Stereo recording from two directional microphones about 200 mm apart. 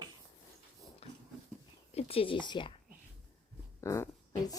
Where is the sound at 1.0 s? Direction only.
30° left (ahead or behind).